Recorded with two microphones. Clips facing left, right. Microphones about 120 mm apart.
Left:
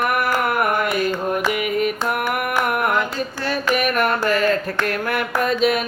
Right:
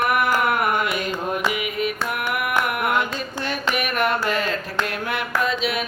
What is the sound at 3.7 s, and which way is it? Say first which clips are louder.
Carnatic music: left 3 dB; 50° left (ahead or behind).